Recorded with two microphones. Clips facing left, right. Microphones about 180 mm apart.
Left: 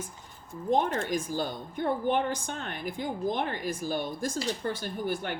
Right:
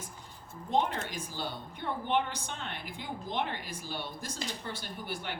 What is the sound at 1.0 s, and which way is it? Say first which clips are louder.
A woman's voice: left 8 dB; 45° left (ahead or behind).